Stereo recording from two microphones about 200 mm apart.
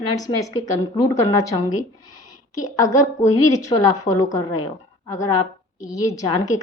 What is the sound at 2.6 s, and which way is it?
A woman's voice, 15° left (ahead or behind).